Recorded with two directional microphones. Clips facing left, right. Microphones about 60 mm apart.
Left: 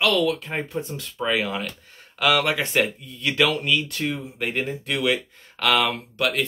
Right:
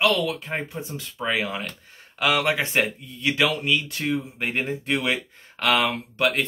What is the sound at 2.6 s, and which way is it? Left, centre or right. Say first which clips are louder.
Speech: left 1 dB; right.